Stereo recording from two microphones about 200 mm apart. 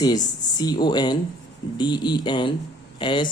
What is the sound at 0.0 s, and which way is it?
Speech, 20° left (ahead or behind).